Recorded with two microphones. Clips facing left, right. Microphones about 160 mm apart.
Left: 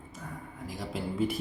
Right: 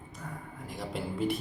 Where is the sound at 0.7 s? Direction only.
Centre (ahead or behind).